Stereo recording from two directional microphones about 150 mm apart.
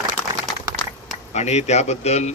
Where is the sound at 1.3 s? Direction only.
50° left (ahead or behind).